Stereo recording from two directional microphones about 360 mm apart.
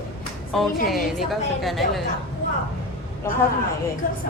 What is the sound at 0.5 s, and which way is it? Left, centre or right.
A woman's voice, centre.